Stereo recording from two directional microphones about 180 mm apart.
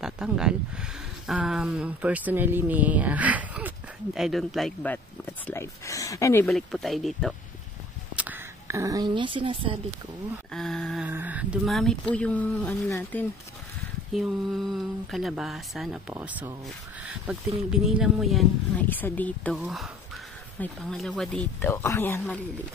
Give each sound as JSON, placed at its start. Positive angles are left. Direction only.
{"t": 0.0, "sound": "speech", "side_deg": -5}
{"t": 6.4, "sound": "speech", "side_deg": 0}
{"t": 8.2, "sound": "speech", "side_deg": -10}
{"t": 10.5, "sound": "speech", "side_deg": 5}
{"t": 11.1, "sound": "speech", "side_deg": -10}
{"t": 14.1, "sound": "speech", "side_deg": 0}
{"t": 18.9, "sound": "speech", "side_deg": 10}